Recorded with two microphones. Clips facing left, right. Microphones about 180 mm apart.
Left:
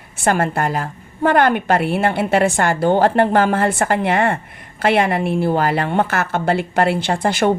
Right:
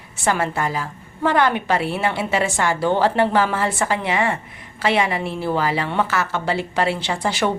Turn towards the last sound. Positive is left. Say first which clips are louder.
# left 4 dB
turn(degrees=55)  # may be behind; listen again after turning